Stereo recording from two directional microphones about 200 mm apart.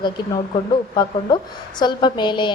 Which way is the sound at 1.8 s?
20° left (ahead or behind).